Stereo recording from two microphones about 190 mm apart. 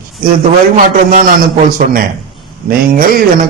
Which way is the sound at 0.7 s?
45° right (ahead or behind).